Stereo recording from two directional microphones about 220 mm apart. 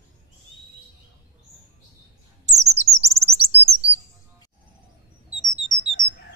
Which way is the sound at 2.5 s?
30° right (ahead or behind).